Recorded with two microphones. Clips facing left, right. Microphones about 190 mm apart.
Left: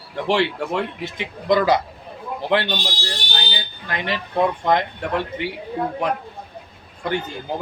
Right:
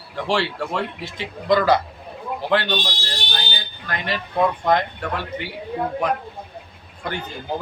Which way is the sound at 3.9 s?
20° left (ahead or behind).